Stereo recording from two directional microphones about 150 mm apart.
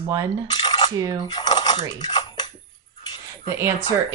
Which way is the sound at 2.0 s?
30° left (ahead or behind).